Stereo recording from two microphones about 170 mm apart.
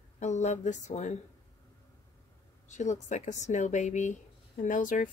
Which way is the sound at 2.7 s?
45° left (ahead or behind).